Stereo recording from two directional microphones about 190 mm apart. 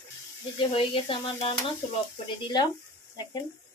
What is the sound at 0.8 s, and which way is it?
Speech, 30° left (ahead or behind).